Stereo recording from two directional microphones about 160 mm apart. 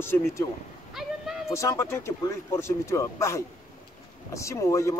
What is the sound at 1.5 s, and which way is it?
Speech, 20° left (ahead or behind).